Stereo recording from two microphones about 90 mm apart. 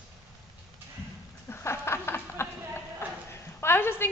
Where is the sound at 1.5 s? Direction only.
25° left (ahead or behind).